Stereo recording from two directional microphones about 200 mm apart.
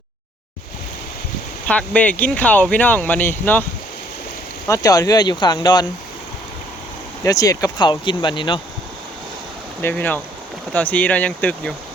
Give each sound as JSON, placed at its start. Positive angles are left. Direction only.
{"t": 1.6, "sound": "speech", "side_deg": 5}
{"t": 4.7, "sound": "speech", "side_deg": 15}
{"t": 7.3, "sound": "speech", "side_deg": 20}
{"t": 9.8, "sound": "speech", "side_deg": 10}